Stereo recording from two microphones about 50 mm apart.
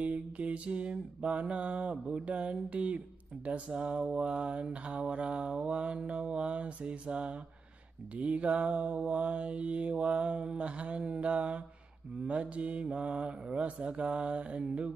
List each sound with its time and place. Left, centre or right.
0.0 s mantra: right